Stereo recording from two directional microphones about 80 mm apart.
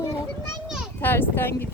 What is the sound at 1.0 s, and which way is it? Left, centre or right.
Speech, left.